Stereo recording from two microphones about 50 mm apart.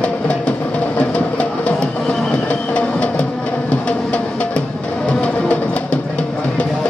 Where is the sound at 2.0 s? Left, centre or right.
Centre.